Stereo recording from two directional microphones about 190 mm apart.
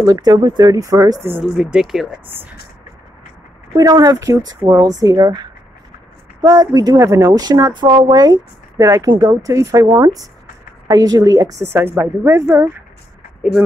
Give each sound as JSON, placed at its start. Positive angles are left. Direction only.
{"t": 0.0, "sound": "speech", "side_deg": -20}
{"t": 1.4, "sound": "speech", "side_deg": -5}
{"t": 3.7, "sound": "a woman's voice", "side_deg": -20}
{"t": 13.4, "sound": "speech", "side_deg": 0}